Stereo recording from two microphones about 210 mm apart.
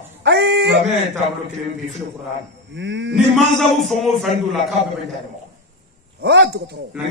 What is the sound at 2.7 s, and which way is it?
Speech, 55° right (ahead or behind).